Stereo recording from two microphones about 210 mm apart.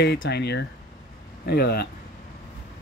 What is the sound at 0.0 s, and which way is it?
Speech, 55° left (ahead or behind).